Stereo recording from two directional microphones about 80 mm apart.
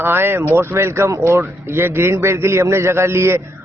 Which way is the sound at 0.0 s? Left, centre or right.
Right.